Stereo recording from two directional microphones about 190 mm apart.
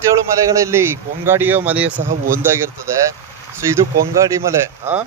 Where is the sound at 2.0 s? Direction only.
45° right (ahead or behind).